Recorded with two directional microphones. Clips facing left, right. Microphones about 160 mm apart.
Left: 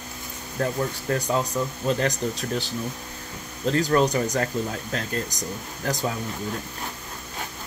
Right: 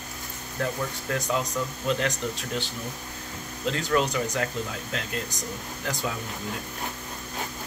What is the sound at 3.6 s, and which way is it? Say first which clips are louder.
Speech: left 5 dB; 40° left (ahead or behind).